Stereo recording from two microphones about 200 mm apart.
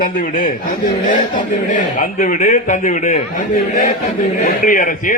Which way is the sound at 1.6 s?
40° left (ahead or behind).